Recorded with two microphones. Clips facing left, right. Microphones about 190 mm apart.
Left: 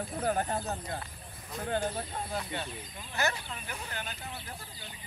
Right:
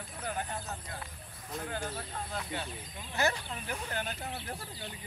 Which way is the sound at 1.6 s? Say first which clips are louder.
Left 8 dB; 30° left (ahead or behind).